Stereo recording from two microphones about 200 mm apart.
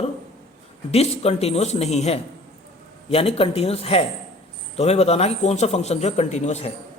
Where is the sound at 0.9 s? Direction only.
30° left (ahead or behind).